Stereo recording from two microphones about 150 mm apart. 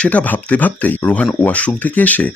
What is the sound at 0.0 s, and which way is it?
Speech, 10° left (ahead or behind).